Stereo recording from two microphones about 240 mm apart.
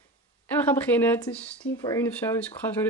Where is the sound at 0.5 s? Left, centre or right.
Centre.